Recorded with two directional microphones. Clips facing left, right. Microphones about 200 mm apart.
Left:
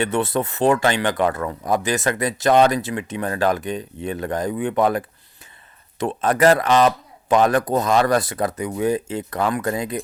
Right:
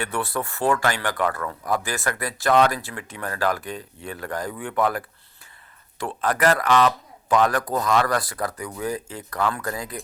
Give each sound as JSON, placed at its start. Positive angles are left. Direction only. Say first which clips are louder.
{"t": 0.0, "sound": "speech", "louder": "left 6 dB", "side_deg": 20}